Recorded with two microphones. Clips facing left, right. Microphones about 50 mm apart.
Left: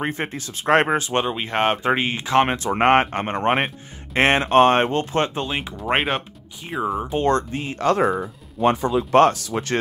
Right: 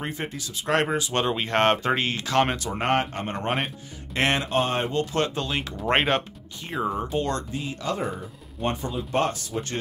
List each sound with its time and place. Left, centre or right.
0.0 s speech: left
1.2 s speech: centre
1.9 s speech: centre
2.7 s speech: left
5.1 s speech: left
5.8 s speech: centre
7.1 s speech: left
7.8 s speech: left
8.6 s speech: left